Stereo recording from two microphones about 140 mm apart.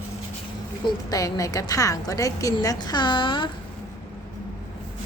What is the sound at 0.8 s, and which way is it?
A woman's voice, 25° left (ahead or behind).